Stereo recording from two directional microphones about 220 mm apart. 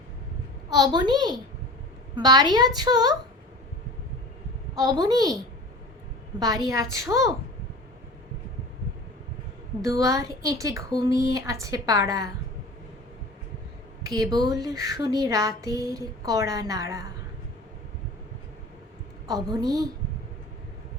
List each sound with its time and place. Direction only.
0.7 s a child's voice: 20° right (ahead or behind)
4.7 s speech: 15° right (ahead or behind)
6.4 s speech: 15° right (ahead or behind)
9.8 s speech: 15° right (ahead or behind)
14.1 s speech: 15° right (ahead or behind)
19.3 s speech: 15° right (ahead or behind)